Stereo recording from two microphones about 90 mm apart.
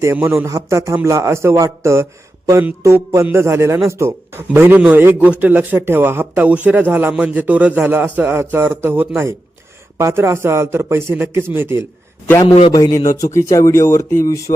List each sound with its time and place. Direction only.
0.0 s a man's voice: 30° right (ahead or behind)
12.7 s speech: 45° left (ahead or behind)